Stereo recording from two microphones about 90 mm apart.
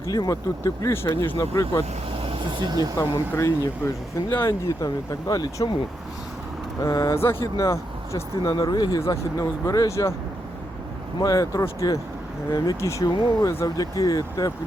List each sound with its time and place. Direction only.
0.1 s speech: 40° left (ahead or behind)
2.1 s vehicle: 80° right
2.6 s speech: 45° right (ahead or behind)
3.0 s speech: 35° left (ahead or behind)
5.3 s speech: 50° left (ahead or behind)
6.8 s speech: 40° left (ahead or behind)
7.2 s speech: 25° left (ahead or behind)
8.5 s speech: 50° left (ahead or behind)
9.0 s speech: 40° left (ahead or behind)
11.2 s speech: 40° left (ahead or behind)
13.1 s speech: 50° left (ahead or behind)